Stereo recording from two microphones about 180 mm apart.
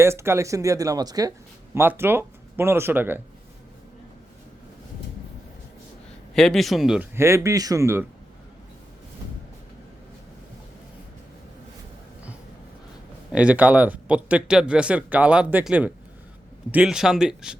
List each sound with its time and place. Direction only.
0.0 s speech: 15° right (ahead or behind)
6.3 s speech: 5° left (ahead or behind)
7.2 s speech: 15° right (ahead or behind)
13.3 s speech: 5° right (ahead or behind)